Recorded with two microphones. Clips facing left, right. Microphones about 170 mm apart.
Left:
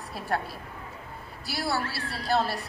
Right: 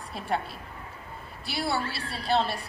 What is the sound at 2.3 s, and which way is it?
Speech, 20° right (ahead or behind).